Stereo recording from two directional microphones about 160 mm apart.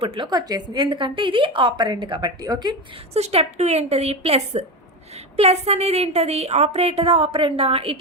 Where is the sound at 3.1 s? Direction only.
40° right (ahead or behind).